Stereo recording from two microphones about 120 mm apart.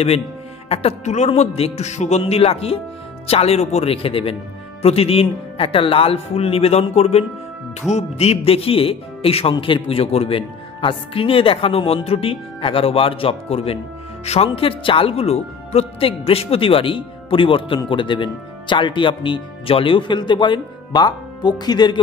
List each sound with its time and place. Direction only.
0.7 s speech: 65° left (ahead or behind); by 22.0 s 35° left (ahead or behind)